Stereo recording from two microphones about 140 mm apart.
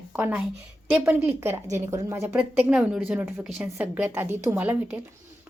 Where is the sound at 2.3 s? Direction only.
10° right (ahead or behind).